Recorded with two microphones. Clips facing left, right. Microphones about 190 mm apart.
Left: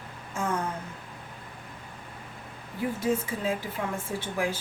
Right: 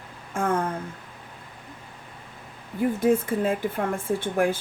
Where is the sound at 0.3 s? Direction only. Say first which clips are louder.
Right 5 dB; 55° right (ahead or behind).